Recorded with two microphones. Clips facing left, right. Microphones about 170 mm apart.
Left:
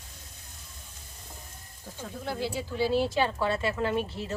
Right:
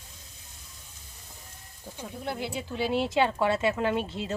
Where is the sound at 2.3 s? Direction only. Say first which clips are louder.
Left 1 dB; 20° right (ahead or behind).